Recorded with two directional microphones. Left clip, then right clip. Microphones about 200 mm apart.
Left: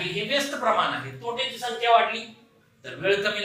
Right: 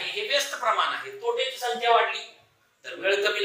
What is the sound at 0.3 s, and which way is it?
Speech, 20° right (ahead or behind).